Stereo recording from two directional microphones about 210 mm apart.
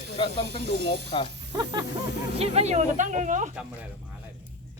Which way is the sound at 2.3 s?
30° right (ahead or behind).